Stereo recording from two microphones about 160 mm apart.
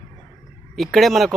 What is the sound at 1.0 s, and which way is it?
Speech, centre (ahead or behind).